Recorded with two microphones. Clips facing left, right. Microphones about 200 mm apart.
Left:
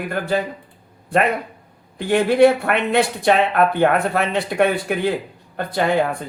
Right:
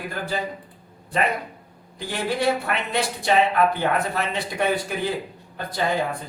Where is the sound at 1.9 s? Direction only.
60° left (ahead or behind).